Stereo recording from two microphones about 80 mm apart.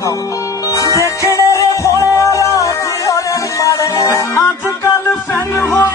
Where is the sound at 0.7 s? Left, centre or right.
Left.